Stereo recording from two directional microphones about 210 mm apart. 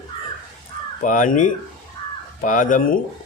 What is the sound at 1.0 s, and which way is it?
Speech, 40° left (ahead or behind).